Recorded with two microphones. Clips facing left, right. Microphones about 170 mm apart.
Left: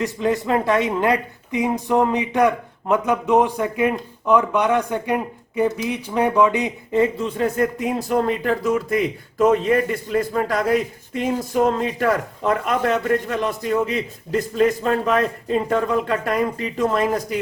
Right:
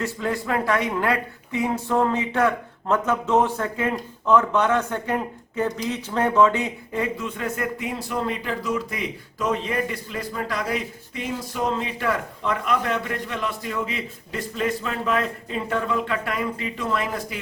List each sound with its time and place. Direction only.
0.0 s a man's voice: 20° left (ahead or behind); by 17.3 s 45° left (ahead or behind)